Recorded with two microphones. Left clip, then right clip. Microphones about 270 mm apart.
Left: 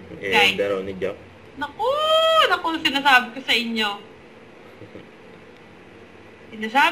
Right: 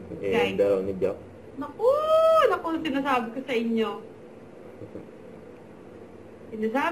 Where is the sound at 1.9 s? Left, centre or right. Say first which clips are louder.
Left 2 dB; centre.